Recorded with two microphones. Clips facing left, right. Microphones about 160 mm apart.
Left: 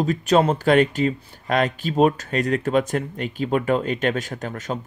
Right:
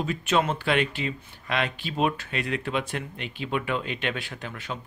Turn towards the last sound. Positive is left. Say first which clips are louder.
# left 7 dB
turn(degrees=45)  # may be behind; listen again after turning